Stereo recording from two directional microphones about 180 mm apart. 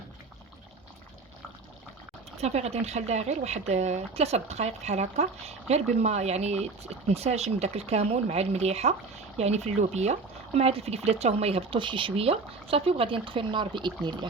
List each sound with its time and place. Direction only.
2.4 s speech: 35° right (ahead or behind)